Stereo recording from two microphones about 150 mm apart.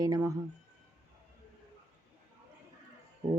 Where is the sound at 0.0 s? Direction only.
25° right (ahead or behind).